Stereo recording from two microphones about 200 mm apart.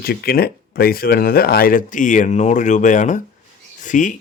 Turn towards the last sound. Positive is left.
turn(degrees=40)  # may be behind; listen again after turning